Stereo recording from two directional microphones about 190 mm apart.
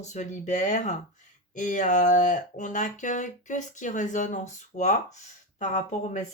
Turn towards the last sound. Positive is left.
turn(degrees=40)  # may be behind; listen again after turning